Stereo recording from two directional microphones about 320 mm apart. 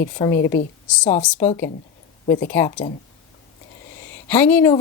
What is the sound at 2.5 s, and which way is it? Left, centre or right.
Speech, centre.